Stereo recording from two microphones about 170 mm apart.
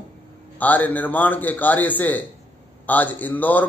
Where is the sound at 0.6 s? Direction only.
10° left (ahead or behind).